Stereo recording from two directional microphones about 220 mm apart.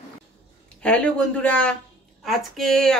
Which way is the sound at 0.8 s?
5° left (ahead or behind).